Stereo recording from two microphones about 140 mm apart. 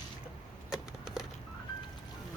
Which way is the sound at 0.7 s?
5° right (ahead or behind).